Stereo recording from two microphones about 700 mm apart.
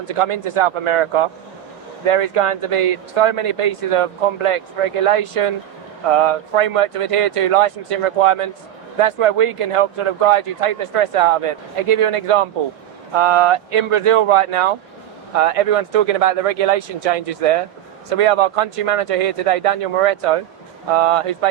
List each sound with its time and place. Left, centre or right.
0.0 s speech: right